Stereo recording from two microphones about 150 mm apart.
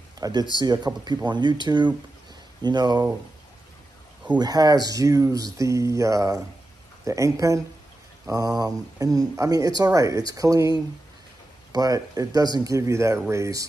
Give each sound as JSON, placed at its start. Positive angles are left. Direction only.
{"t": 0.2, "sound": "speech", "side_deg": -25}
{"t": 4.4, "sound": "speech", "side_deg": -25}